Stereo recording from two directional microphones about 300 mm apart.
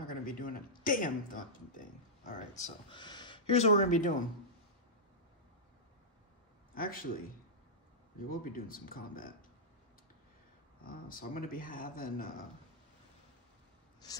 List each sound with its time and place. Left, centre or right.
0.0 s a sound: left
6.7 s a man's voice: left
8.3 s speech: left
10.8 s speech: left